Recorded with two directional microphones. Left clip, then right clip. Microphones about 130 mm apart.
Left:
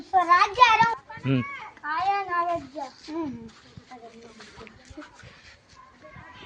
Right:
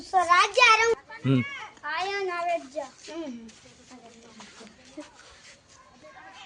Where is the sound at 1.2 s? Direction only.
55° right (ahead or behind).